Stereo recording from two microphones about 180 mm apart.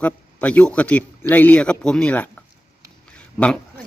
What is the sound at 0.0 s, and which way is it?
Speech, 10° left (ahead or behind).